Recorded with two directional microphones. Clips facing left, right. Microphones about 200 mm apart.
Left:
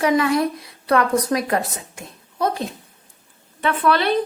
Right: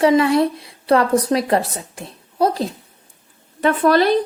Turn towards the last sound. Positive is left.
turn(degrees=-40)  # may be behind; listen again after turning